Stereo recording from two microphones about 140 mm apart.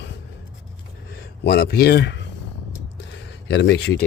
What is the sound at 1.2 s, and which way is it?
Speech, 90° left.